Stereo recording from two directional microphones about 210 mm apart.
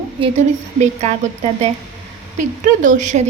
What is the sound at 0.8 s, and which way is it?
Speech, 30° right (ahead or behind).